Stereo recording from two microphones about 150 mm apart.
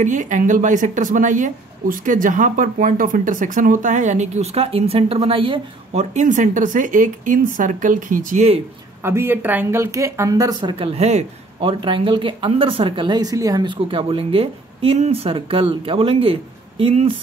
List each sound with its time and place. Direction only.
0.0 s speech: 55° right (ahead or behind)
9.0 s speech: 15° right (ahead or behind); by 17.2 s 40° right (ahead or behind)